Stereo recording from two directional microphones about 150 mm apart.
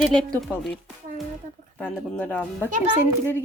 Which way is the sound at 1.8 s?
10° left (ahead or behind).